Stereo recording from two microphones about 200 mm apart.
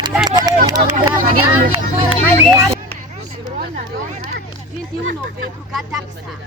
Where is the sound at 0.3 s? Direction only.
20° right (ahead or behind).